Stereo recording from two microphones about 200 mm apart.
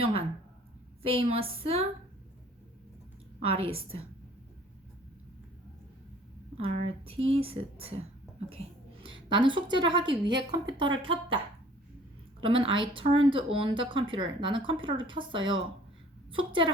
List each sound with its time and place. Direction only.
0.0 s speech: 30° right (ahead or behind)
3.7 s speech: 30° right (ahead or behind)
6.6 s speech: 30° right (ahead or behind)
9.0 s speech: 25° right (ahead or behind)
12.4 s speech: 25° right (ahead or behind)